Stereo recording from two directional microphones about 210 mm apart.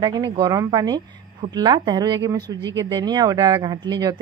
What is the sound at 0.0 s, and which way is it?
A woman's voice, 20° right (ahead or behind).